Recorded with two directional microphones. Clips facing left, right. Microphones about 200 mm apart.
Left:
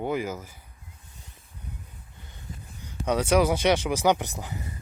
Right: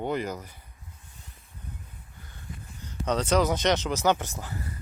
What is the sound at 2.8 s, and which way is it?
Speech, 10° left (ahead or behind).